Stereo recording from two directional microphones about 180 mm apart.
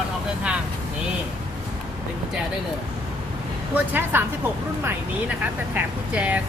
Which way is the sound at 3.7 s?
10° right (ahead or behind).